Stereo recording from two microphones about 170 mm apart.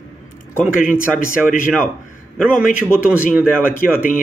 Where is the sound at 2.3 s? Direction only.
5° right (ahead or behind).